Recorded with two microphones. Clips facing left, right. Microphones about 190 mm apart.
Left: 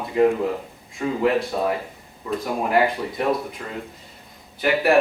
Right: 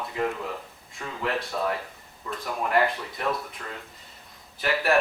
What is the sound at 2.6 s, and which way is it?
Speech, 5° left (ahead or behind).